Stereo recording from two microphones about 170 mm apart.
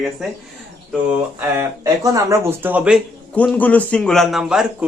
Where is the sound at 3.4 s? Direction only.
10° left (ahead or behind).